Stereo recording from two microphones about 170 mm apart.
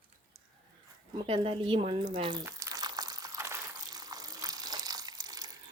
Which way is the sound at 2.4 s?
20° right (ahead or behind).